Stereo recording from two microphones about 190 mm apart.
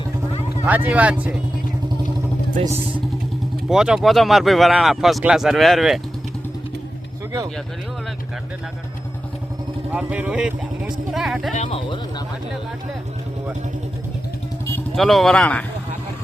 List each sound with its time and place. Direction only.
0.6 s speech: 10° right (ahead or behind)
2.6 s speech: 35° right (ahead or behind)
3.7 s speech: 5° right (ahead or behind)
9.9 s speech: 5° right (ahead or behind)
11.5 s speech: 35° left (ahead or behind)
14.9 s speech: centre (ahead or behind)